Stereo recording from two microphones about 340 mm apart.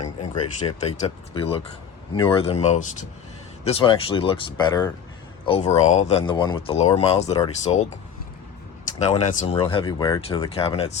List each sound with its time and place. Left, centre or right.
0.9 s speech: centre